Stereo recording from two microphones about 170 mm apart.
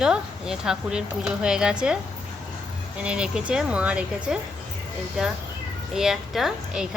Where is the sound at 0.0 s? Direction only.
5° right (ahead or behind).